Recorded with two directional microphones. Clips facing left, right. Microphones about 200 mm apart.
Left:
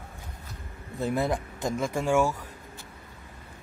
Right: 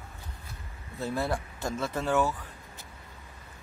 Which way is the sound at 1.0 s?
15° left (ahead or behind).